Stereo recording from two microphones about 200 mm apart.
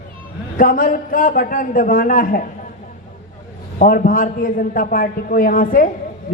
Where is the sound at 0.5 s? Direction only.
45° left (ahead or behind).